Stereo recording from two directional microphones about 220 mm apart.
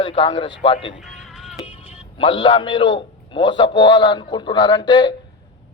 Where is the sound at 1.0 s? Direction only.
Centre (ahead or behind).